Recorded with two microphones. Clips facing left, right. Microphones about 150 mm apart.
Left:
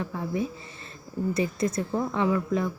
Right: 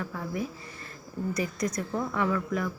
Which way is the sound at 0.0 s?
25° left (ahead or behind).